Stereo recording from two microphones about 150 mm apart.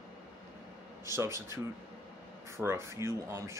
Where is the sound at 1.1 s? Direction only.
20° right (ahead or behind).